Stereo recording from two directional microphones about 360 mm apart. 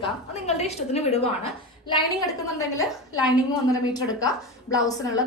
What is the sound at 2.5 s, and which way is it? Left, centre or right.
A woman's voice, centre.